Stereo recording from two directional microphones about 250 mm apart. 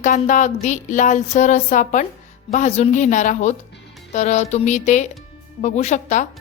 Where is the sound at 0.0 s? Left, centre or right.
Left.